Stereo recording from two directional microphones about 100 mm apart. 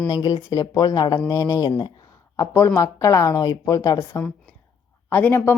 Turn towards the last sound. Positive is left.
turn(degrees=20)  # may be behind; listen again after turning